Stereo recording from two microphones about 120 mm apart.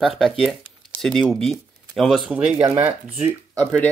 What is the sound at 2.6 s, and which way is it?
Speech, 55° right (ahead or behind).